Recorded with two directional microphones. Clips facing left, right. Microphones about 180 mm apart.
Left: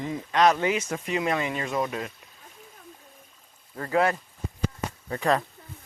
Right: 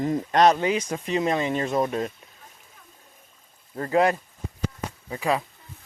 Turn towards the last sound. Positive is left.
turn(degrees=-5)  # may be behind; listen again after turning